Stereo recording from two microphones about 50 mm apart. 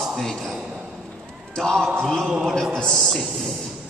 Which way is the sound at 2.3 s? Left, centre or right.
Centre.